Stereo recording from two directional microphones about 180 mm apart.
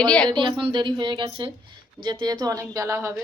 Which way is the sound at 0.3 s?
25° right (ahead or behind).